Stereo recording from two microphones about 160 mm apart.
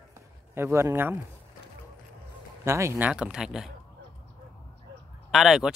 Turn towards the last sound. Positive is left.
turn(degrees=0)  # may be behind; listen again after turning